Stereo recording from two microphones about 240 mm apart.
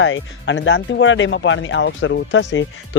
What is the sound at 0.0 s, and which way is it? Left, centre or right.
Speech, left.